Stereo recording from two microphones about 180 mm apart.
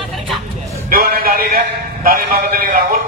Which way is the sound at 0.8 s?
55° right (ahead or behind).